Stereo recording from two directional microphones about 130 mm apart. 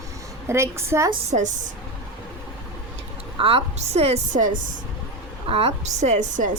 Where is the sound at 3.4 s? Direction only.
50° right (ahead or behind).